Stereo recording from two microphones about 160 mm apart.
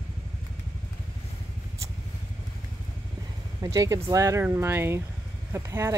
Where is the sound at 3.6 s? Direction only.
20° right (ahead or behind).